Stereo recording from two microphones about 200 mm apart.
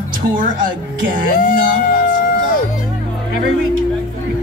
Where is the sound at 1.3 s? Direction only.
45° left (ahead or behind).